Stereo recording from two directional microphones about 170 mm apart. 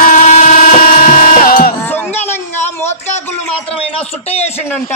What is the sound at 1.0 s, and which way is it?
Music, 55° left (ahead or behind).